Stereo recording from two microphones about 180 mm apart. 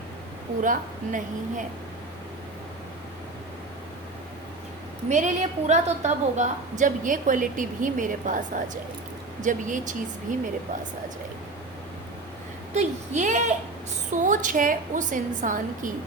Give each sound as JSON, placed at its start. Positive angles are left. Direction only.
{"t": 0.6, "sound": "a woman's voice", "side_deg": -45}
{"t": 5.0, "sound": "a woman's voice", "side_deg": -40}
{"t": 12.7, "sound": "a woman's voice", "side_deg": -40}